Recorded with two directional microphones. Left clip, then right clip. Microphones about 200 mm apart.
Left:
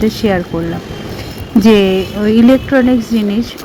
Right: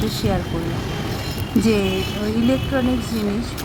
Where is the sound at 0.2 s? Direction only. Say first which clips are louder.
Left 9 dB; 15° left (ahead or behind).